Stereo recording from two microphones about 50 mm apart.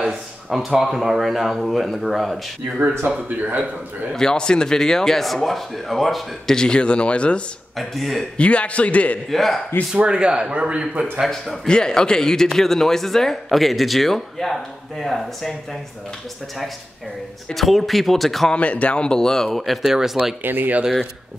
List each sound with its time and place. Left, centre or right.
0.1 s speech: centre
3.3 s speech: right
4.1 s speech: centre
6.5 s speech: centre
7.7 s speech: centre
8.4 s speech: left
9.3 s speech: centre
10.0 s speech: centre
11.2 s speech: centre
17.6 s speech: centre
18.5 s speech: left; by 20.1 s centre
20.4 s speech: right